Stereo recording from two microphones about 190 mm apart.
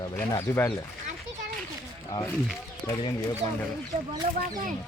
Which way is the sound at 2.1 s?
15° left (ahead or behind).